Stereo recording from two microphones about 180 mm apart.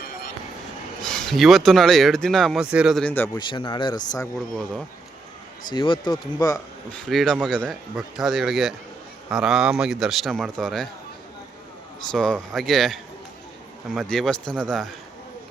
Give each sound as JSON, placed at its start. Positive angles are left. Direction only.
{"t": 1.0, "sound": "speech", "side_deg": 5}
{"t": 3.0, "sound": "speech", "side_deg": 10}
{"t": 3.3, "sound": "speech", "side_deg": 25}
{"t": 5.6, "sound": "speech", "side_deg": 25}
{"t": 7.0, "sound": "speech", "side_deg": 0}
{"t": 12.1, "sound": "speech", "side_deg": 5}